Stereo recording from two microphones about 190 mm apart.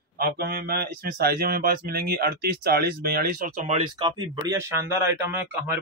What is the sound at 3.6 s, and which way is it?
Speech, 30° right (ahead or behind).